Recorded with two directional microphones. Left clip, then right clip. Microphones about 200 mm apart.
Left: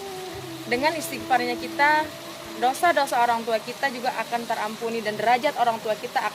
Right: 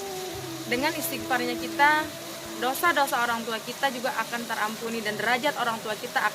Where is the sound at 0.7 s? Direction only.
30° left (ahead or behind).